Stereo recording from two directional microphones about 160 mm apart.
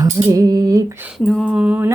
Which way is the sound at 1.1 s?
Centre (ahead or behind).